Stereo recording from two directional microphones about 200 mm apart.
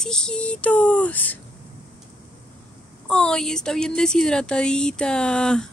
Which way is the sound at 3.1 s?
5° left (ahead or behind).